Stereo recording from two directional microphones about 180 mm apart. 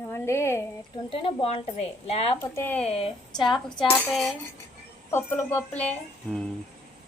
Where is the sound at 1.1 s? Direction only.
30° left (ahead or behind).